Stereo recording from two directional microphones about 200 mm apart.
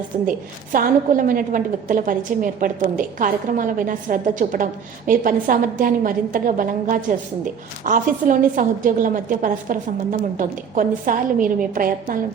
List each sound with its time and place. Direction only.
0.3 s a woman's voice: 45° right (ahead or behind)